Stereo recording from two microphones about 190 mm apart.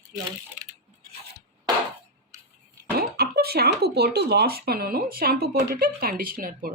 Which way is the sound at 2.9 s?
55° right (ahead or behind).